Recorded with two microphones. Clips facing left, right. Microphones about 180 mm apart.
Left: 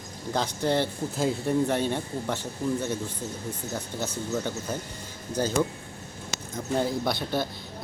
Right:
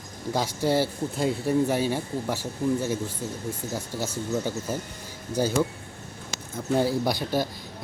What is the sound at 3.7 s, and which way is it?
Speech, 10° right (ahead or behind).